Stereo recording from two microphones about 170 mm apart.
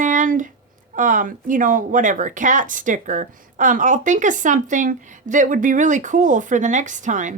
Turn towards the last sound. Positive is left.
turn(degrees=-45)  # may be behind; listen again after turning